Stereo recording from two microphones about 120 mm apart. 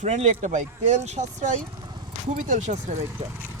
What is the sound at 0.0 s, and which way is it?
Speech, 80° right.